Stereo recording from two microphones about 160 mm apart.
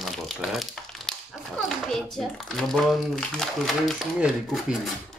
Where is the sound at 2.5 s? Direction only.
Centre (ahead or behind).